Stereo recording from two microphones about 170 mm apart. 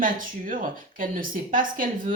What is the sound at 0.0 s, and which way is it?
A woman's voice, 55° right (ahead or behind).